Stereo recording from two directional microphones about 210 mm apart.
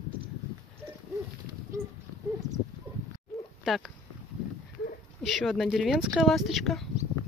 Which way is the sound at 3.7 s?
Centre (ahead or behind).